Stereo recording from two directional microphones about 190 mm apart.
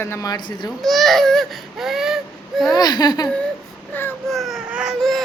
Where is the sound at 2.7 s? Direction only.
20° left (ahead or behind).